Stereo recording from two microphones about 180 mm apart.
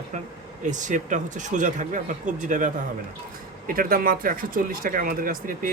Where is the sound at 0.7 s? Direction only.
45° right (ahead or behind).